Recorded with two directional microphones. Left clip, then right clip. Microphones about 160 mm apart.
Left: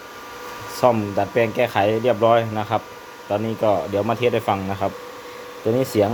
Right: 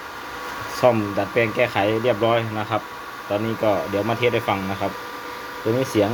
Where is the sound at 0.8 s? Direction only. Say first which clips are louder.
Left 1 dB; 25° left (ahead or behind).